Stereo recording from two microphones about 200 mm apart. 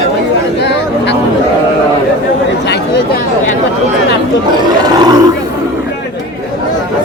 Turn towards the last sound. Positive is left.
turn(degrees=-20)  # may be behind; listen again after turning